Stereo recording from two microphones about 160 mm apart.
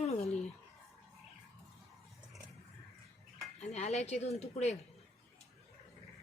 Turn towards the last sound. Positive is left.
turn(degrees=45)  # may be behind; listen again after turning